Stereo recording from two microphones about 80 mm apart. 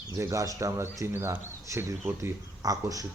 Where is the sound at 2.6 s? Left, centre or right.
Right.